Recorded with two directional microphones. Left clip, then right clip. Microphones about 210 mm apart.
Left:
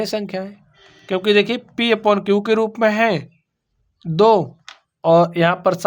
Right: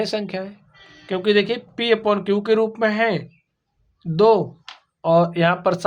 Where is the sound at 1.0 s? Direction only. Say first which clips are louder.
Left 3 dB; 40° left (ahead or behind).